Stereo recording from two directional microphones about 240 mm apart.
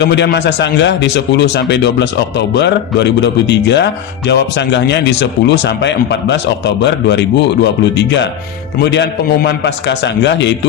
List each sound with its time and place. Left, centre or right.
0.0 s speech: left